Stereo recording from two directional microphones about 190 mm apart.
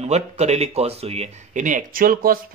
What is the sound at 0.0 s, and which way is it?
Speech, 35° right (ahead or behind).